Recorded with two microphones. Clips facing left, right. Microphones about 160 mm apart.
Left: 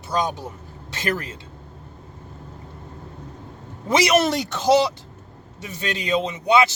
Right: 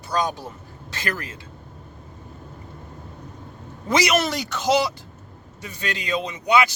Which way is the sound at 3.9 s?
30° left (ahead or behind).